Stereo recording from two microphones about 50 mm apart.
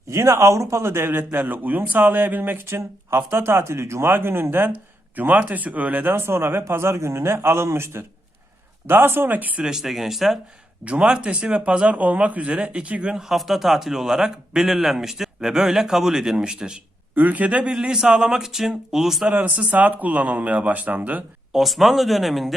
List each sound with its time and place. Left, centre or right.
0.1 s speech: right
2.6 s a man's voice: right
4.1 s speech: right
5.1 s speech: right
6.1 s a man's voice: right
8.9 s speech: right
9.6 s speech: centre
10.8 s speech: right
13.1 s a man's voice: centre
17.2 s a man's voice: right; by 19.3 s centre
19.3 s speech: right
21.5 s speech: centre